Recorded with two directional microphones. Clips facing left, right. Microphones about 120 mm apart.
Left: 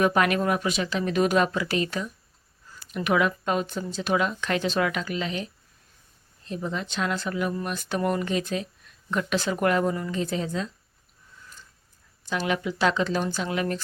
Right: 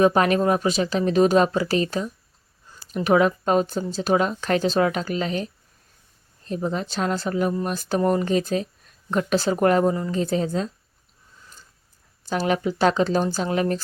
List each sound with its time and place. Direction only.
0.0 s speech: 30° right (ahead or behind)
12.3 s speech: 40° right (ahead or behind)